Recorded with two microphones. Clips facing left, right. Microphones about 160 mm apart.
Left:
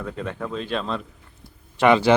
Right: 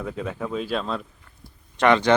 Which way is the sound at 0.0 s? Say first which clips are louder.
Even; 5° right (ahead or behind).